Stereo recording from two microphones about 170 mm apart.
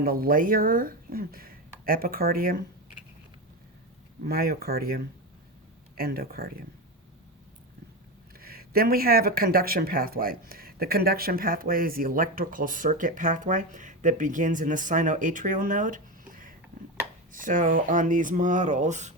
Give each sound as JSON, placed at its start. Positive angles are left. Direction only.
{"t": 0.0, "sound": "speech", "side_deg": -60}
{"t": 4.2, "sound": "speech", "side_deg": -65}
{"t": 8.4, "sound": "speech", "side_deg": -60}